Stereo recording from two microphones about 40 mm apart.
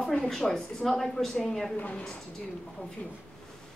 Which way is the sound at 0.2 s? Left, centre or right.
Centre.